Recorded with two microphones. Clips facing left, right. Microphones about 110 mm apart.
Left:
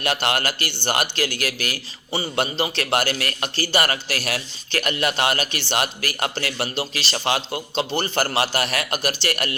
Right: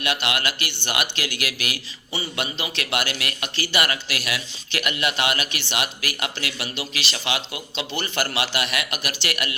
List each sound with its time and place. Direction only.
0.0 s speech: 40° left (ahead or behind)